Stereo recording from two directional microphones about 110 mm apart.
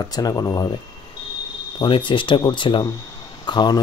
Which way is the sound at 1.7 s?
50° left (ahead or behind).